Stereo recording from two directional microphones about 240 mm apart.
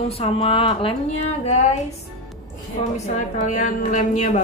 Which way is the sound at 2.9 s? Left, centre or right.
Left.